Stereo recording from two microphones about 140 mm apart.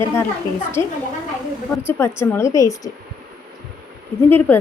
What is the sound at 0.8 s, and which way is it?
Speech, 30° right (ahead or behind).